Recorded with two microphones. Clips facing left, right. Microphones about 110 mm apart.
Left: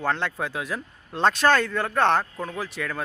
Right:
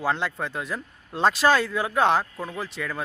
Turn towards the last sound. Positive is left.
turn(degrees=0)  # may be behind; listen again after turning